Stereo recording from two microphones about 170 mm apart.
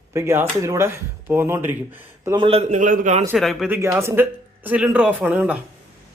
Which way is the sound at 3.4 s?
Centre (ahead or behind).